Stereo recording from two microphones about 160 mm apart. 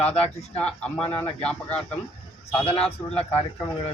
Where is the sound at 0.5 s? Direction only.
5° left (ahead or behind).